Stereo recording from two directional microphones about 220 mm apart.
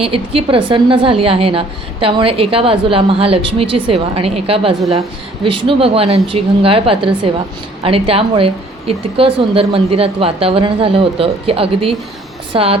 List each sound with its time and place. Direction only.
0.0 s a woman's voice: 25° right (ahead or behind)